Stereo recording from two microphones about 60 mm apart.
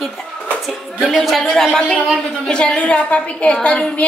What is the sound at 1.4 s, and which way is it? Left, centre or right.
A man's voice, centre.